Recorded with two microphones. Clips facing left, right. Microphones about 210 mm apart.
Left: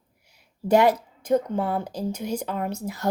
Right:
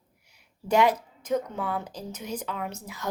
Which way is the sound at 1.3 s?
40° left (ahead or behind).